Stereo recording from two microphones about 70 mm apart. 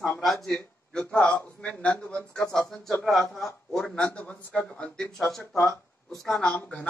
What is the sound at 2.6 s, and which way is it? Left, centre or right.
Speech, centre.